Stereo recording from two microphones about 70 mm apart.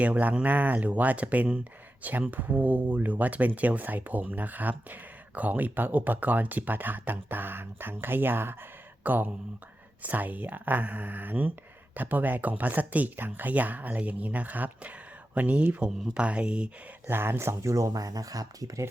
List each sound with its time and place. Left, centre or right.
0.0 s speech: right
17.1 s speech: right